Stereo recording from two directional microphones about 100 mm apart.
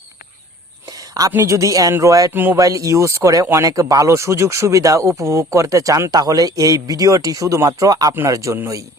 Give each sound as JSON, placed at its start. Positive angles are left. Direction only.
{"t": 0.9, "sound": "a sound", "side_deg": -35}
{"t": 1.3, "sound": "speech", "side_deg": -30}
{"t": 2.3, "sound": "speech", "side_deg": -20}
{"t": 2.6, "sound": "speech", "side_deg": -35}